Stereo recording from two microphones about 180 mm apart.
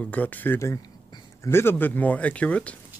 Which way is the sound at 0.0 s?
10° left (ahead or behind).